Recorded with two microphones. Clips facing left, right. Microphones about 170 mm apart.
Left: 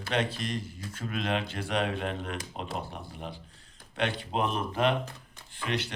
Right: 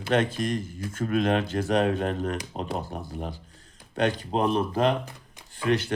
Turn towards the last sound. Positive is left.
turn(degrees=-50)  # may be behind; listen again after turning